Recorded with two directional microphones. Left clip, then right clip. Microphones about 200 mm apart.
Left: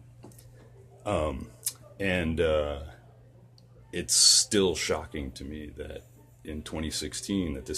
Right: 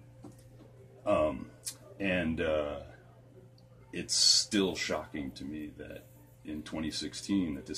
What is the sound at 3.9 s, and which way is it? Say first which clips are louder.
Speech: left 4 dB; 60° left (ahead or behind).